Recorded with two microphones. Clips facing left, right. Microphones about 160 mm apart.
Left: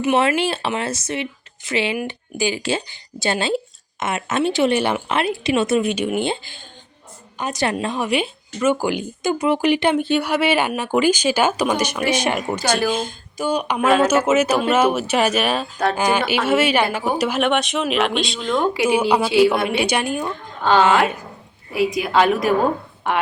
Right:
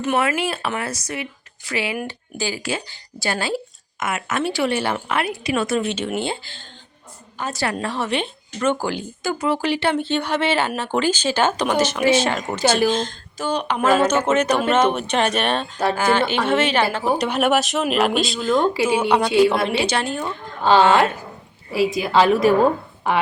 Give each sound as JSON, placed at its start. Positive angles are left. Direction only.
{"t": 0.2, "sound": "speech", "side_deg": 30}
{"t": 16.0, "sound": "speech", "side_deg": 15}
{"t": 18.8, "sound": "speech", "side_deg": 10}
{"t": 21.9, "sound": "speech", "side_deg": 0}